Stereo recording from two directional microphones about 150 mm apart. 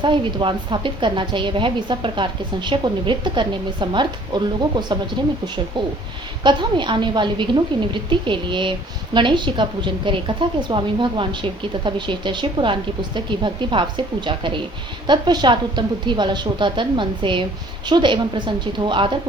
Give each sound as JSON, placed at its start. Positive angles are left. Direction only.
{"t": 0.0, "sound": "a woman's voice", "side_deg": -35}
{"t": 6.4, "sound": "a woman's voice", "side_deg": -30}